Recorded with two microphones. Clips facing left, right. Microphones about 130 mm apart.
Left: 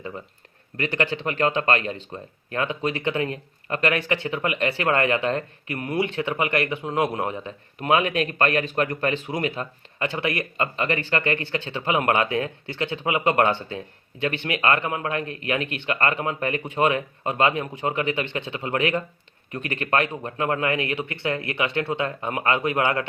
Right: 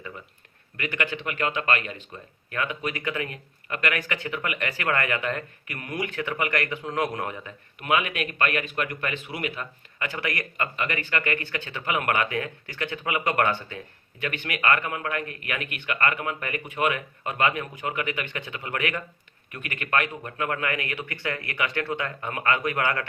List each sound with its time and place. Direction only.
0.8 s speech: 35° left (ahead or behind)